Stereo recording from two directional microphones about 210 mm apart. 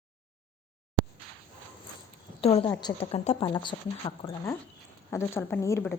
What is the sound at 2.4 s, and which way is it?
A woman's voice, 30° left (ahead or behind).